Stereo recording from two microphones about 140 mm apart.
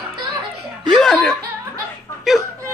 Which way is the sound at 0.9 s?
5° left (ahead or behind).